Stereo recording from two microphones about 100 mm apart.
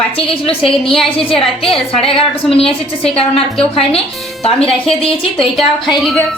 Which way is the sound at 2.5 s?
70° left (ahead or behind).